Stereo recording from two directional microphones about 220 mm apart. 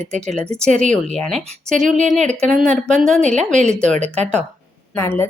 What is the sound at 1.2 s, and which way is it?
Speech, centre (ahead or behind).